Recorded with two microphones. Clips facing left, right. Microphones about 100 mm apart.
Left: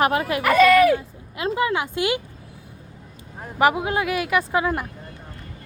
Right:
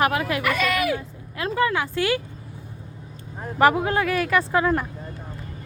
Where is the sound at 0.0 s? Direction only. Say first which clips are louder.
Left 2 dB; 30° left (ahead or behind).